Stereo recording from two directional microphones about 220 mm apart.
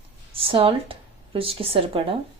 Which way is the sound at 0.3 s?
25° right (ahead or behind).